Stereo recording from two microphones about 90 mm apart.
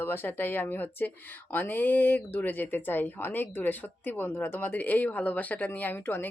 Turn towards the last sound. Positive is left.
turn(degrees=25)  # may be behind; listen again after turning